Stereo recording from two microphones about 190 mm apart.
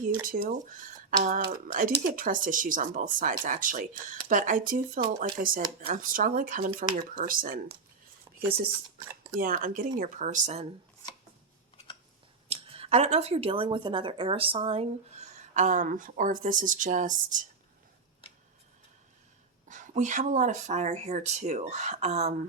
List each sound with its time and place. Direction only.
0.2 s speech: 50° right (ahead or behind)
9.4 s speech: 45° right (ahead or behind)
12.5 s speech: 30° right (ahead or behind)
19.6 s speech: 40° right (ahead or behind)